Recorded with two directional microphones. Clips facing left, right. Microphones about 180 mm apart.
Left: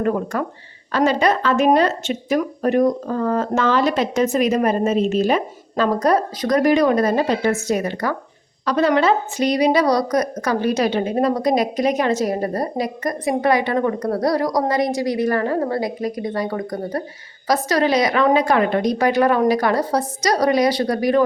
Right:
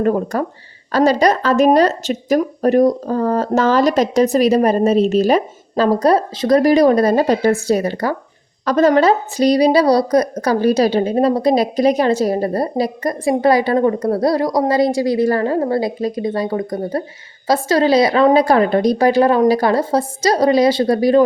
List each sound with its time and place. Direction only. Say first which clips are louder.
0.0 s a woman's voice: right 4 dB; 35° right (ahead or behind)
8.6 s a woman's voice: right 4 dB; 45° right (ahead or behind)